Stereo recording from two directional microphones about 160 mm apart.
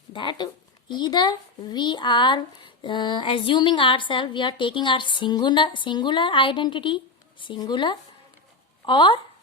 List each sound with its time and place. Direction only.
0.1 s a child's voice: 30° left (ahead or behind)